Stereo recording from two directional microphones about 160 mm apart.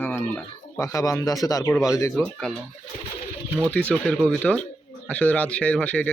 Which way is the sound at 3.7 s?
10° left (ahead or behind).